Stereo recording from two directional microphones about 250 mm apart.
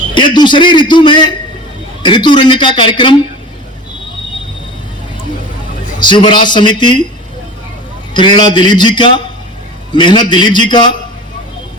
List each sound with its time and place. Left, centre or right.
0.1 s a man's voice: centre
6.0 s a man's voice: centre
8.1 s a man's voice: centre